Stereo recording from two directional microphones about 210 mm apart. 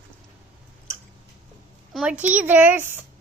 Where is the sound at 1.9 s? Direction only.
5° right (ahead or behind).